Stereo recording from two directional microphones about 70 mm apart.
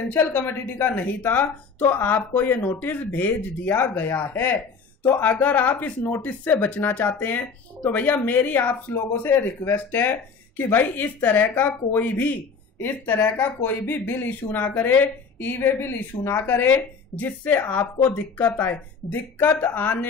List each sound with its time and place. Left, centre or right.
0.2 s speech: left